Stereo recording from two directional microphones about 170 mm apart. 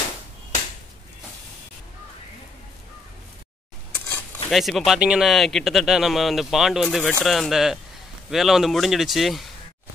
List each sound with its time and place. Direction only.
4.5 s speech: centre (ahead or behind)